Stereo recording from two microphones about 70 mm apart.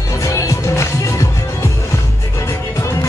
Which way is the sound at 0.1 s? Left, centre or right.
Left.